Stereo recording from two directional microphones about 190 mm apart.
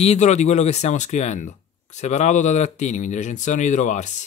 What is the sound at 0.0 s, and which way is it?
Speech, 35° left (ahead or behind).